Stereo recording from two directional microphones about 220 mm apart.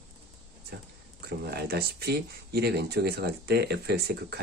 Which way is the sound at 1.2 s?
45° right (ahead or behind).